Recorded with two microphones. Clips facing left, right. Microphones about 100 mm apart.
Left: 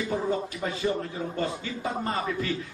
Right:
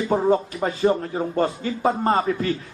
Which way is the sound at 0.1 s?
50° right (ahead or behind).